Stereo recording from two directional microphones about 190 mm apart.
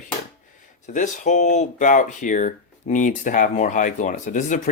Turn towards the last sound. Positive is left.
turn(degrees=40)  # may be behind; listen again after turning